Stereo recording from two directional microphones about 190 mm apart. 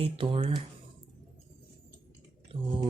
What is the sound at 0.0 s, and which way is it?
Speech, 30° right (ahead or behind).